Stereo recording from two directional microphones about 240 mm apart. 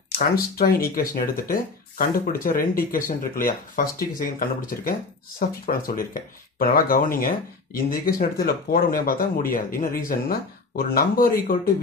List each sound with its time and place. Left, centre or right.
0.2 s speech: left